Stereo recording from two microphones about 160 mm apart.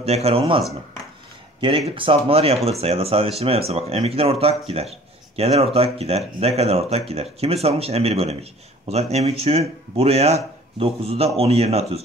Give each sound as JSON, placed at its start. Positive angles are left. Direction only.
{"t": 0.0, "sound": "speech", "side_deg": -40}
{"t": 1.9, "sound": "speech", "side_deg": -35}